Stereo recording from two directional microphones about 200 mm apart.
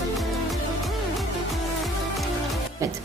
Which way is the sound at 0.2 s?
Centre (ahead or behind).